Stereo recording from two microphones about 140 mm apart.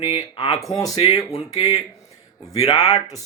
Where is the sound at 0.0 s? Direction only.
30° left (ahead or behind).